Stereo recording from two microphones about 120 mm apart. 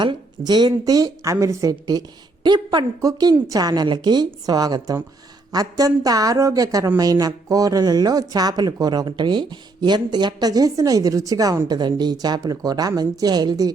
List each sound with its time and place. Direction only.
0.0 s a woman's voice: 40° right (ahead or behind)